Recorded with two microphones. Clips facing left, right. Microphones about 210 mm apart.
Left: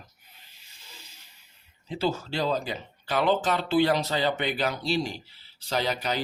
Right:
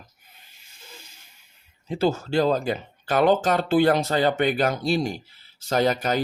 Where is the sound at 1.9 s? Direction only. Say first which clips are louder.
Right 5 dB; 45° right (ahead or behind).